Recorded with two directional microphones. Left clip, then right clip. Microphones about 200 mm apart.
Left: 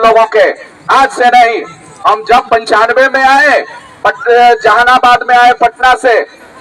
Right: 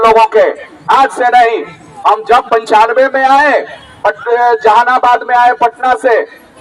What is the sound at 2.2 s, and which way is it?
A man's voice, 40° left (ahead or behind).